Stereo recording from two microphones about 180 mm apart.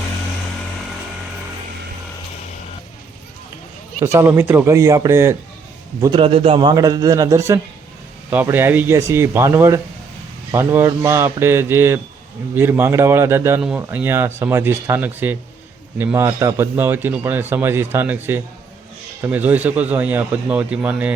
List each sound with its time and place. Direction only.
4.0 s speech: 15° right (ahead or behind)
6.0 s a man's voice: 25° right (ahead or behind); by 21.1 s 10° right (ahead or behind)